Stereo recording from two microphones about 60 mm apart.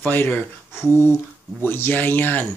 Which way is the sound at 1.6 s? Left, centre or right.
Left.